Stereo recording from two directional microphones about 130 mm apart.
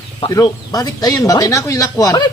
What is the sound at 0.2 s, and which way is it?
Speech, 30° left (ahead or behind).